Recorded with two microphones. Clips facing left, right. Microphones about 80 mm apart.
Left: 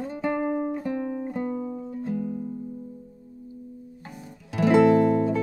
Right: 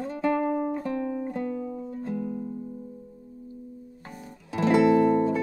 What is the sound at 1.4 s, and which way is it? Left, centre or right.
Music, left.